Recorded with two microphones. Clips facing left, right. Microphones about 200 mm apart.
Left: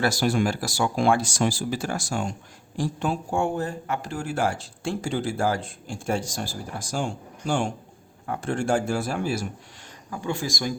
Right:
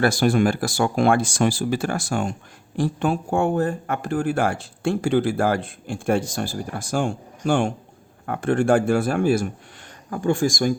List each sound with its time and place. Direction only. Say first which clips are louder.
0.0 s speech: right 5 dB; 55° right (ahead or behind)